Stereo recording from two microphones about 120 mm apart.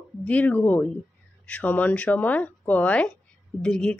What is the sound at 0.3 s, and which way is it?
Speech, 15° left (ahead or behind).